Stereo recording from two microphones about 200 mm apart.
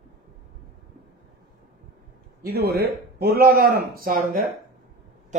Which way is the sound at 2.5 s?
55° right (ahead or behind).